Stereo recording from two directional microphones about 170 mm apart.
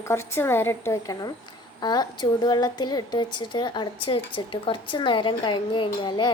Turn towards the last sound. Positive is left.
turn(degrees=30)  # may be behind; listen again after turning